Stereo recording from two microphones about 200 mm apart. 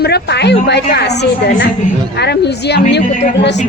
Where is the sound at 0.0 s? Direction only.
55° left (ahead or behind).